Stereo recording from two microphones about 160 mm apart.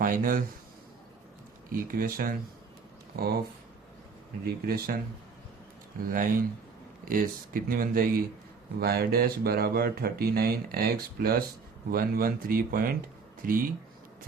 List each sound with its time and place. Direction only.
0.0 s speech: 60° right (ahead or behind)
1.8 s speech: 65° right (ahead or behind)
4.4 s speech: 70° right (ahead or behind)
6.1 s speech: 60° right (ahead or behind)
8.8 s speech: 75° right (ahead or behind); by 13.7 s 60° right (ahead or behind)